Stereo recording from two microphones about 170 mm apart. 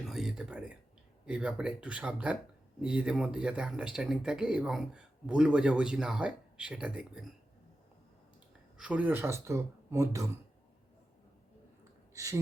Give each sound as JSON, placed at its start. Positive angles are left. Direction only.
{"t": 0.0, "sound": "a sound", "side_deg": 0}
{"t": 1.2, "sound": "speech", "side_deg": -5}
{"t": 8.8, "sound": "speech", "side_deg": -10}
{"t": 12.1, "sound": "speech", "side_deg": -20}